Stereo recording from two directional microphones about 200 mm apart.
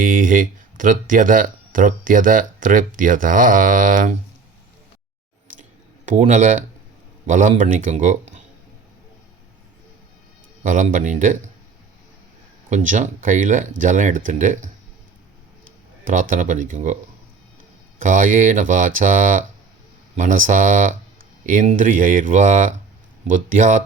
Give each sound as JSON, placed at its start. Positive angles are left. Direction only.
{"t": 0.0, "sound": "speech", "side_deg": -40}
{"t": 6.1, "sound": "speech", "side_deg": -35}
{"t": 10.6, "sound": "speech", "side_deg": -40}
{"t": 12.7, "sound": "speech", "side_deg": -40}
{"t": 16.3, "sound": "speech", "side_deg": -40}
{"t": 18.0, "sound": "speech", "side_deg": -40}